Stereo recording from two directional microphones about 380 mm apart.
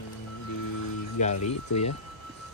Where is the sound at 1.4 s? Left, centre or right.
Left.